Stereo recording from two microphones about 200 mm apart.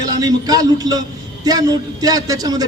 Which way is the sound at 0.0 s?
20° right (ahead or behind).